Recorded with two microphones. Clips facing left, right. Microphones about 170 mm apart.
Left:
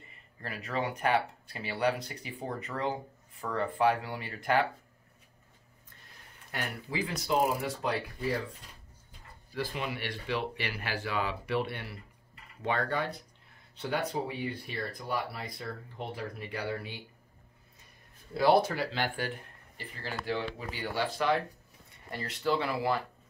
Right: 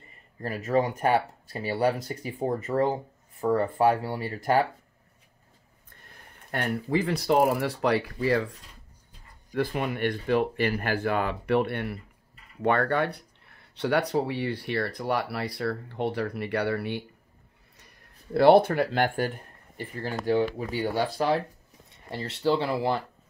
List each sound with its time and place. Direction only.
0.4 s speech: 40° right (ahead or behind)
6.5 s speech: 55° right (ahead or behind); by 8.5 s 85° right
9.5 s speech: 60° right (ahead or behind)
18.3 s speech: 60° right (ahead or behind); by 23.0 s 30° right (ahead or behind)